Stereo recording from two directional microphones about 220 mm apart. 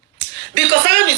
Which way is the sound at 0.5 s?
50° right (ahead or behind).